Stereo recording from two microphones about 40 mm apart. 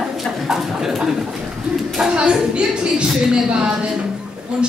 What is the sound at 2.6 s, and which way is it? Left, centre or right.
A woman's voice, right.